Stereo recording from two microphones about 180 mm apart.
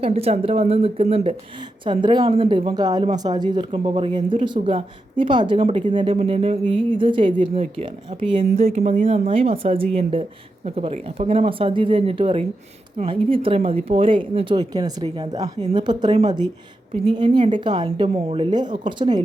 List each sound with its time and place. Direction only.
0.0 s a woman's voice: 35° right (ahead or behind)